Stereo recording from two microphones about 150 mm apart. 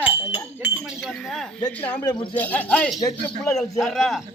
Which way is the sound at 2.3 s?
10° left (ahead or behind).